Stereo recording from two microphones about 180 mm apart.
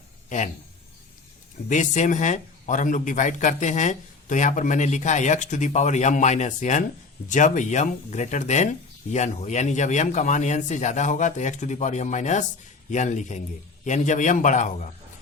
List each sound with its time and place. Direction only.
0.3 s speech: 45° left (ahead or behind)
1.7 s a man's voice: 45° left (ahead or behind)